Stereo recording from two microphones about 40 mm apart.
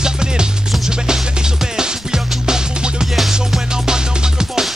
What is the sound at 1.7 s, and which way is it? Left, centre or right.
Music, centre.